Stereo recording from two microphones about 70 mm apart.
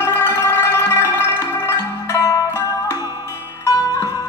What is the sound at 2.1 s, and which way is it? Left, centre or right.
Zither, left.